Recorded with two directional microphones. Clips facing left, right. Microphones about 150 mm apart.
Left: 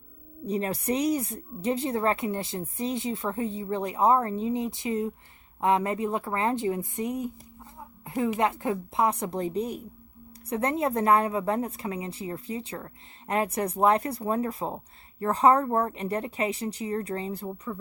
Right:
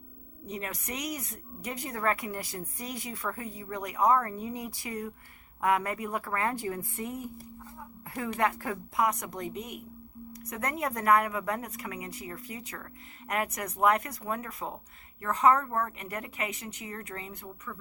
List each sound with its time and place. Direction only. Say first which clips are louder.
0.4 s speech: left 10 dB; 30° left (ahead or behind)
7.8 s a sound: left 9 dB; 20° left (ahead or behind)
8.4 s speech: left 4 dB; 20° left (ahead or behind)